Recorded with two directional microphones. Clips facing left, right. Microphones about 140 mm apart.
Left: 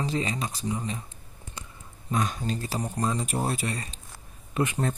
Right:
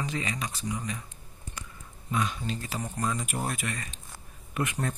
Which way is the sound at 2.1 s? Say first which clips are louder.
Left 2 dB; 45° left (ahead or behind).